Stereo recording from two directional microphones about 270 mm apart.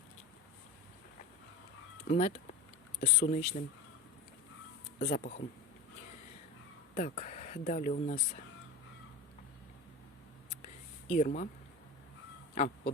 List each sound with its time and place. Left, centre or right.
2.0 s speech: left
4.9 s speech: left
6.9 s speech: left
11.1 s speech: left
12.5 s a sound: left